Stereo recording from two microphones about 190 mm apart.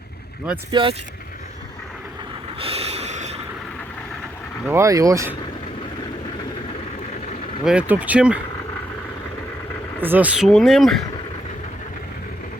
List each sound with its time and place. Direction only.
0.7 s speech: 25° right (ahead or behind)
2.6 s snort: 30° right (ahead or behind)
4.7 s speech: 15° right (ahead or behind)
7.6 s speech: 5° right (ahead or behind)
10.0 s speech: 10° right (ahead or behind)